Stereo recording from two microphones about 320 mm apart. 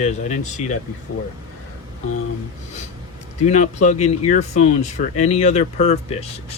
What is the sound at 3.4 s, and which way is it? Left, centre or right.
Speech, left.